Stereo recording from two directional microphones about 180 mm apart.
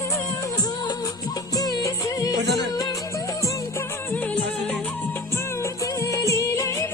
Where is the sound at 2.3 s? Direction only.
70° right (ahead or behind).